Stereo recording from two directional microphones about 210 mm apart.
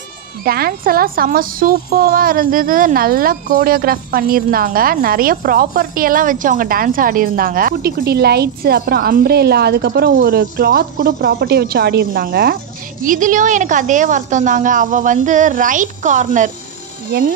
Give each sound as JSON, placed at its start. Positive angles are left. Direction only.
{"t": 0.4, "sound": "a woman's voice", "side_deg": -45}